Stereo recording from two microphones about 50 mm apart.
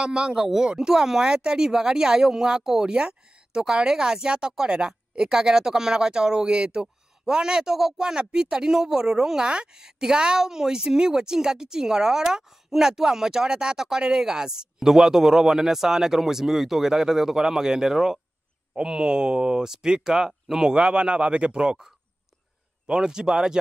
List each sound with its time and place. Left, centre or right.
0.0 s speech: centre